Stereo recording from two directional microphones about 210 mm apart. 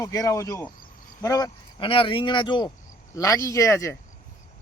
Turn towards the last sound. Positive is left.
turn(degrees=15)  # may be behind; listen again after turning